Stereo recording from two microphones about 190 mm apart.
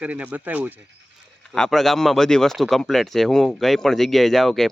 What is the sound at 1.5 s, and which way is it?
Speech, centre (ahead or behind).